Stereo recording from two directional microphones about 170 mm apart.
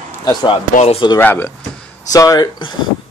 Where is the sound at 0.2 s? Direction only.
25° left (ahead or behind).